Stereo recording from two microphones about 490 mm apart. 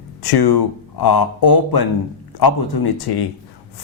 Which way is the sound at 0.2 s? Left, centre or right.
Left.